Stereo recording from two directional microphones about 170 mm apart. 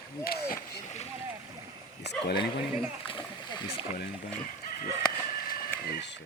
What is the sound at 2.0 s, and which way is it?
Bow-wow, 80° left.